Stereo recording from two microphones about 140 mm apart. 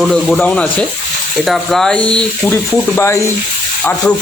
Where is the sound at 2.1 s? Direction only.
15° left (ahead or behind).